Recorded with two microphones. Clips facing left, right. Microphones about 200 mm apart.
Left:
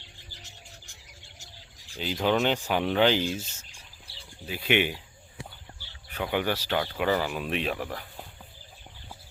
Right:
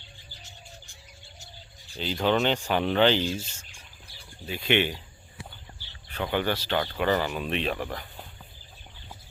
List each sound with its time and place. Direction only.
0.0 s bird: 80° left
2.0 s speech: 10° left (ahead or behind)
4.4 s speech: 10° left (ahead or behind)
6.1 s speech: 10° left (ahead or behind)